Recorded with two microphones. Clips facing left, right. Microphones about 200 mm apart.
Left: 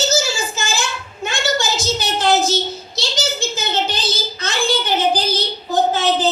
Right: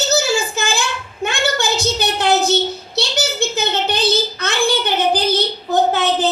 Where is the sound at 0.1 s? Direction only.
60° right (ahead or behind).